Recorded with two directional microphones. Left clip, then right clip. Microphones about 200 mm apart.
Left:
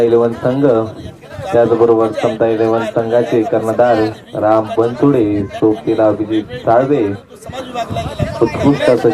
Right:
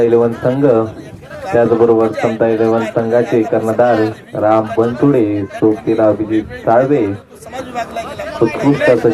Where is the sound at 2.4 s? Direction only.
20° right (ahead or behind).